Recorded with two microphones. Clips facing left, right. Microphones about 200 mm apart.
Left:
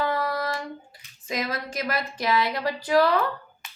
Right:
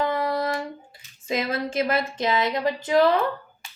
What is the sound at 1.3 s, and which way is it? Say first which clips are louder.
Speech: right 4 dB; 25° right (ahead or behind).